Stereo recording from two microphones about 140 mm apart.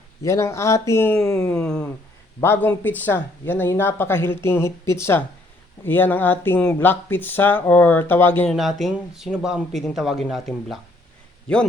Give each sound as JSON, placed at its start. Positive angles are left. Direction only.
{"t": 0.2, "sound": "speech", "side_deg": 20}
{"t": 8.4, "sound": "speech", "side_deg": 0}